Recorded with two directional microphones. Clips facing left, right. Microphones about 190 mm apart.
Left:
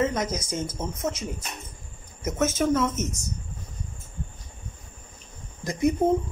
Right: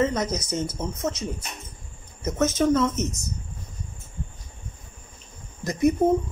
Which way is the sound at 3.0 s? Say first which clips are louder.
Right 2 dB; 45° left (ahead or behind).